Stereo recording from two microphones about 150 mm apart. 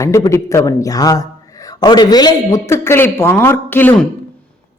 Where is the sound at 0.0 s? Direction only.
20° left (ahead or behind).